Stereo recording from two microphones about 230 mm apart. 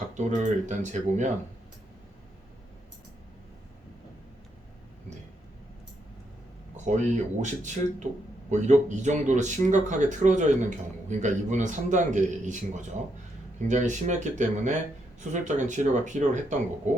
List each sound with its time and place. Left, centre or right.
0.1 s speech: right
6.8 s speech: right